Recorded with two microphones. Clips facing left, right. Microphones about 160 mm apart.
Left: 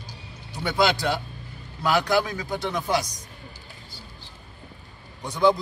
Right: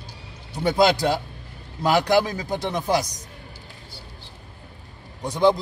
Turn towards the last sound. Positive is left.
turn(degrees=-35)  # may be behind; listen again after turning